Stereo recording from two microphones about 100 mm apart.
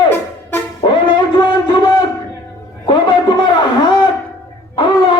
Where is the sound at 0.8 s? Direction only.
45° left (ahead or behind).